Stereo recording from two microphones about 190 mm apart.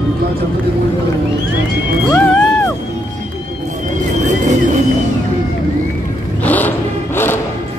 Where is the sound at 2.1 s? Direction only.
5° left (ahead or behind).